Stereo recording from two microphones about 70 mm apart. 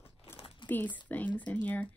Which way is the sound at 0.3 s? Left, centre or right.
Left.